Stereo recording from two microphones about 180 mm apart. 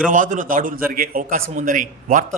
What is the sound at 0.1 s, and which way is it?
A man's voice, 45° right (ahead or behind).